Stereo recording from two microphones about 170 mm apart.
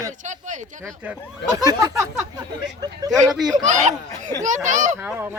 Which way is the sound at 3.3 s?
Centre (ahead or behind).